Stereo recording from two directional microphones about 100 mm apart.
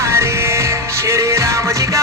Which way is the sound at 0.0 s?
30° right (ahead or behind).